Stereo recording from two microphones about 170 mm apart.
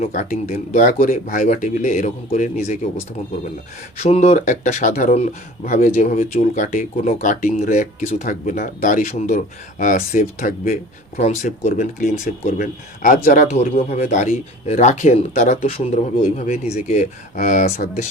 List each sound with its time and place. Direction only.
0.0 s speech: 50° left (ahead or behind)
4.0 s speech: 40° left (ahead or behind)
7.1 s speech: 45° left (ahead or behind)
11.2 s speech: 40° left (ahead or behind)